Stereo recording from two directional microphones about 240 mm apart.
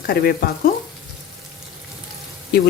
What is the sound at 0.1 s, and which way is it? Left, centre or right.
Speech, left.